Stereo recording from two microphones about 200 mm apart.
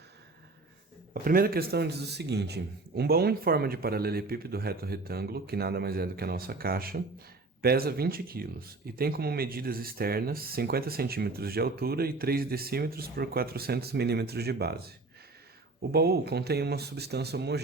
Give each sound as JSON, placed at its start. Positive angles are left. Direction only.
{"t": 1.1, "sound": "speech", "side_deg": -45}